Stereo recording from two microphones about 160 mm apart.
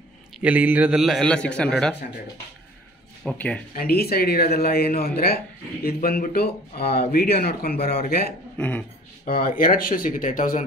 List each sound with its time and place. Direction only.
0.4 s a man's voice: 10° right (ahead or behind)
3.3 s speech: 10° left (ahead or behind)
3.7 s speech: 70° left (ahead or behind)
8.5 s speech: 10° left (ahead or behind)
9.2 s speech: 60° left (ahead or behind)